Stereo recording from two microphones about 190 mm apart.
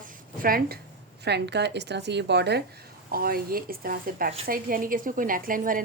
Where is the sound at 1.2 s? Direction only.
60° right (ahead or behind).